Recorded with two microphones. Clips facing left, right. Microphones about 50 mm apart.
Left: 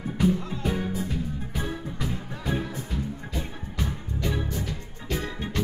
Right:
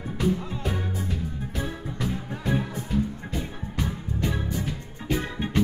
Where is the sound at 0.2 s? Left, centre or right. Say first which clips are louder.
Left 2 dB; centre.